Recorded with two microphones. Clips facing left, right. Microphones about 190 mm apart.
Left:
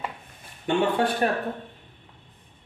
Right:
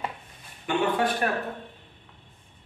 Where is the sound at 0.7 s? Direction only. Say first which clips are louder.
Left 2 dB; 30° left (ahead or behind).